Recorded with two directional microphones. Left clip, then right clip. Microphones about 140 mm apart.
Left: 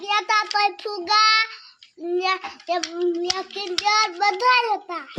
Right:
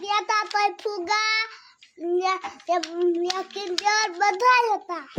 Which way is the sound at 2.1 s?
10° right (ahead or behind).